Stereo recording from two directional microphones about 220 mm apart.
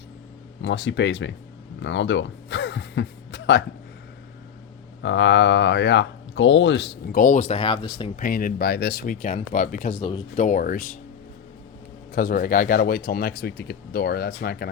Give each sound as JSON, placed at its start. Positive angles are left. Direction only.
{"t": 0.6, "sound": "speech", "side_deg": 55}
{"t": 1.8, "sound": "gasp", "side_deg": 55}
{"t": 5.0, "sound": "speech", "side_deg": 55}
{"t": 7.2, "sound": "speech", "side_deg": 35}
{"t": 8.1, "sound": "speech", "side_deg": 40}
{"t": 10.0, "sound": "speech", "side_deg": 20}
{"t": 10.3, "sound": "speech", "side_deg": 35}
{"t": 12.1, "sound": "speech", "side_deg": 40}